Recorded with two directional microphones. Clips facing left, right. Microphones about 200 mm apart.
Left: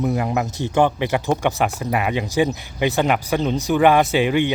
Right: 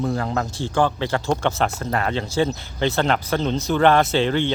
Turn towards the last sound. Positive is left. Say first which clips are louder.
# left 2 dB
turn(degrees=15)  # may be behind; listen again after turning